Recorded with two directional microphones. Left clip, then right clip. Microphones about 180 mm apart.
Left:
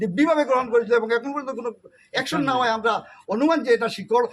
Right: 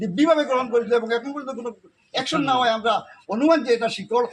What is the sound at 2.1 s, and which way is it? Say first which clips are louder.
Speech: right 1 dB; 35° left (ahead or behind).